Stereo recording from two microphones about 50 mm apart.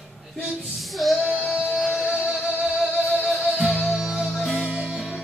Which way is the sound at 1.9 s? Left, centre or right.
Right.